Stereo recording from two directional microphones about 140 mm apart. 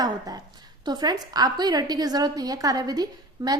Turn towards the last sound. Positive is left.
turn(degrees=-25)  # may be behind; listen again after turning